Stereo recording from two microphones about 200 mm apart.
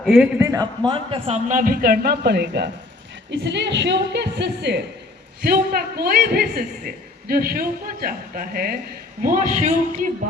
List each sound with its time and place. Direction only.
0.0 s a man's voice: centre (ahead or behind)
0.3 s a man's voice: 15° right (ahead or behind); by 10.1 s 35° right (ahead or behind)